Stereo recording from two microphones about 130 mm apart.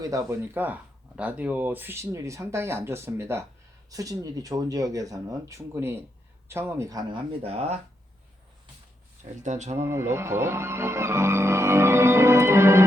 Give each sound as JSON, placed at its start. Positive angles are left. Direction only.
{"t": 0.0, "sound": "speech", "side_deg": -25}
{"t": 7.1, "sound": "speech", "side_deg": -50}
{"t": 9.4, "sound": "speech", "side_deg": -65}
{"t": 9.7, "sound": "speech", "side_deg": -20}